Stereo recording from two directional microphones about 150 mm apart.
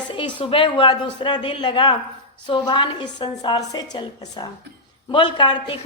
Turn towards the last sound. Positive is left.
turn(degrees=35)  # may be behind; listen again after turning